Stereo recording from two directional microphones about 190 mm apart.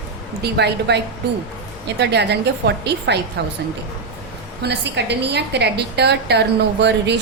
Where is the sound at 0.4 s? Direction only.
60° right (ahead or behind).